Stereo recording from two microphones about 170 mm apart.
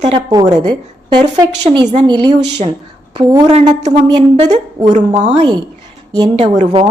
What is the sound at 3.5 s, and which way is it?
A woman's voice, 40° right (ahead or behind).